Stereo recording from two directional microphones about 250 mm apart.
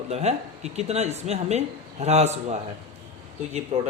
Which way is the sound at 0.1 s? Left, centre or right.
Right.